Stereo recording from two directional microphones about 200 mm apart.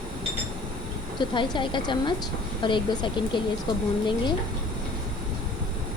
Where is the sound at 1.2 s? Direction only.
25° left (ahead or behind).